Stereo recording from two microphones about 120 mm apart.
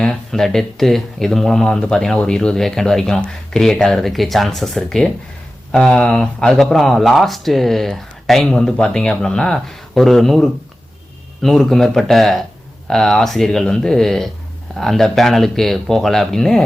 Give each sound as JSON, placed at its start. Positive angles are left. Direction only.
{"t": 0.0, "sound": "speech", "side_deg": 5}